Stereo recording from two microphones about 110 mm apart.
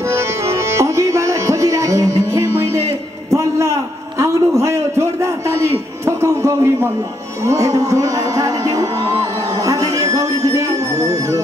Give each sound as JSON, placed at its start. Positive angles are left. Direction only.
{"t": 0.1, "sound": "music", "side_deg": -25}
{"t": 4.2, "sound": "a sound", "side_deg": -30}
{"t": 7.4, "sound": "music", "side_deg": -30}